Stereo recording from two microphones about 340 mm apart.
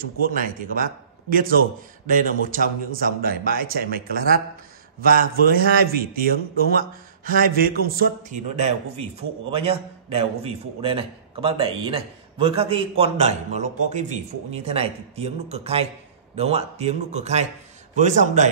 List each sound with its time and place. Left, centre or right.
0.0 s a man's voice: right